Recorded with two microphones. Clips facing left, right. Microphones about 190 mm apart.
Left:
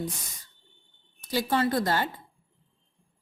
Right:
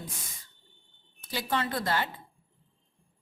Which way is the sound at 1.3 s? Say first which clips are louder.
Left 6 dB; 40° left (ahead or behind).